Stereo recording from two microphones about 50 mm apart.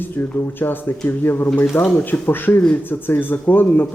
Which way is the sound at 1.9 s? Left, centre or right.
Left.